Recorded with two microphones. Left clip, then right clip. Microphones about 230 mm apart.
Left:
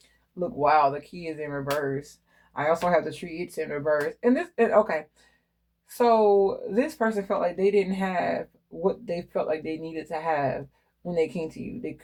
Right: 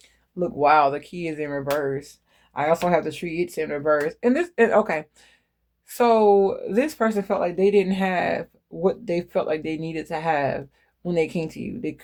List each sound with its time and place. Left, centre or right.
0.3 s speech: right